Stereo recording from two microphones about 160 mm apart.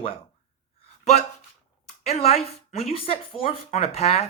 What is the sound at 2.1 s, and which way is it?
Speech, 40° left (ahead or behind).